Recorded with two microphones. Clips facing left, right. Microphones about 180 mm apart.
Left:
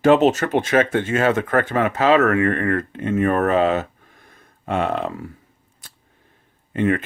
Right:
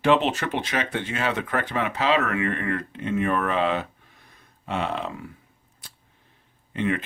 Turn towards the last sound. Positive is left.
turn(degrees=50)  # may be behind; listen again after turning